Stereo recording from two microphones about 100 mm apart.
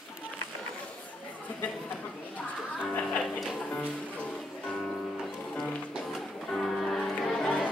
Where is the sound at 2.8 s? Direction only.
10° left (ahead or behind).